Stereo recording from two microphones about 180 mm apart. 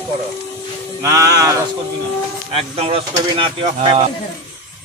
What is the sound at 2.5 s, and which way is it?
Speech, 35° right (ahead or behind).